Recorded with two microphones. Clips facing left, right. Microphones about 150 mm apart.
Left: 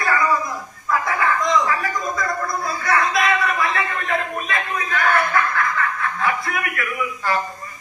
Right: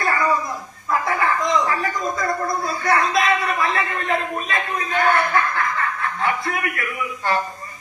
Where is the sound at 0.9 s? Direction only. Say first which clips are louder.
Even; 30° right (ahead or behind).